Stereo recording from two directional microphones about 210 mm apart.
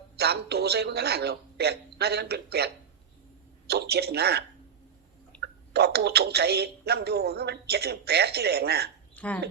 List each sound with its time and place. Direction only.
0.2 s a woman's voice: 50° right (ahead or behind)
3.7 s a woman's voice: 50° right (ahead or behind)
5.3 s chewing: 5° left (ahead or behind)
5.7 s a woman's voice: 50° right (ahead or behind)
9.1 s speech: 5° left (ahead or behind)